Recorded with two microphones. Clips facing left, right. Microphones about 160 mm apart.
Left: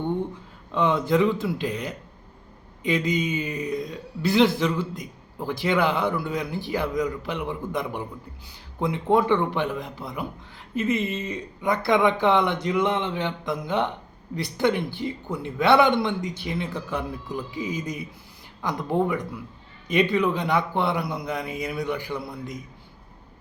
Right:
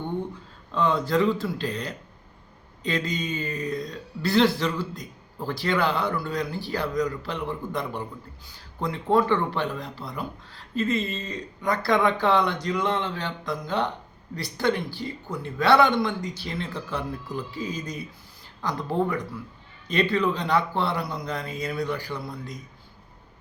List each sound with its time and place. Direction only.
0.7 s a man's voice: 20° left (ahead or behind)